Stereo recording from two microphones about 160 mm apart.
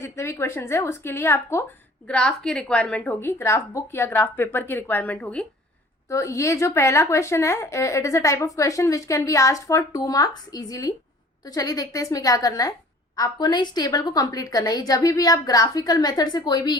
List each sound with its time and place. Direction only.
0.0 s a woman's voice: 15° left (ahead or behind)
2.0 s a woman's voice: 5° left (ahead or behind)
6.1 s speech: 20° left (ahead or behind)